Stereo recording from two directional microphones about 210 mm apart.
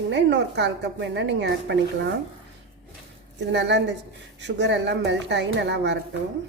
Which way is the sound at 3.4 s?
55° right (ahead or behind).